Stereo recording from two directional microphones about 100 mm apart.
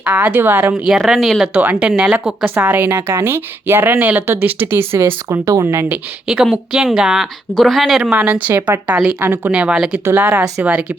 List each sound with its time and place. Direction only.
0.0 s speech: 10° right (ahead or behind)
0.9 s speech: centre (ahead or behind)
1.5 s speech: 15° right (ahead or behind)
6.2 s speech: 5° right (ahead or behind)
9.2 s speech: 20° right (ahead or behind)
9.5 s speech: 10° right (ahead or behind)
10.0 s speech: 25° right (ahead or behind)
10.6 s speech: 10° right (ahead or behind)